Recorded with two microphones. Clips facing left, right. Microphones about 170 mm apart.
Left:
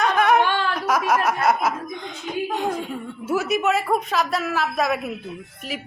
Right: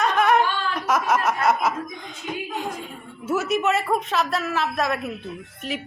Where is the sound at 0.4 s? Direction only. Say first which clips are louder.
Left 4 dB; 75° left (ahead or behind).